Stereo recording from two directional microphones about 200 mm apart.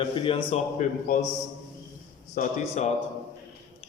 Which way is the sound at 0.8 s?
40° left (ahead or behind).